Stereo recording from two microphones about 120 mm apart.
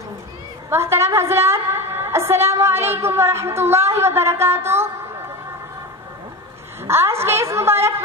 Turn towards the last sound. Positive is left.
turn(degrees=-20)  # may be behind; listen again after turning